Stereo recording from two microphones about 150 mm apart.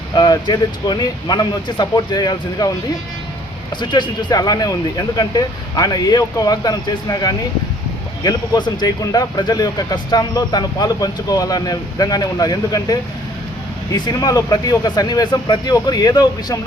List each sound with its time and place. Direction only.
0.2 s speech: 30° left (ahead or behind)
3.8 s speech: 30° left (ahead or behind)